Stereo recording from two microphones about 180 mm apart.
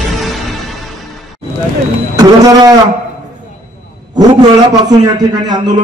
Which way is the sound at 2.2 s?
20° right (ahead or behind).